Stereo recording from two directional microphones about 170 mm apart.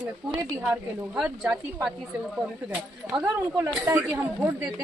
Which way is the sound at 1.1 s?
5° right (ahead or behind).